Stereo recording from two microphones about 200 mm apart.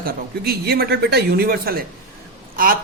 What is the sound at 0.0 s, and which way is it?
Speech, 50° right (ahead or behind).